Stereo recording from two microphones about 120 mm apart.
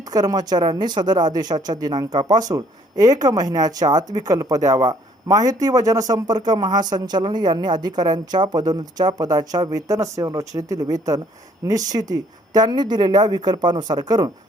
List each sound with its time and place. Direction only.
0.1 s speech: 30° right (ahead or behind)